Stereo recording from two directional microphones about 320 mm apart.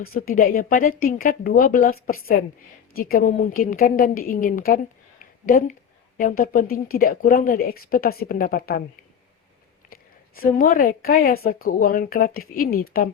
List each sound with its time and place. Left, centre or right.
0.0 s a woman's voice: left
9.9 s a woman's voice: left